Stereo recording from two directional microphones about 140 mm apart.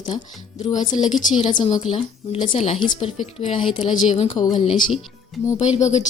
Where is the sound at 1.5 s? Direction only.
35° left (ahead or behind).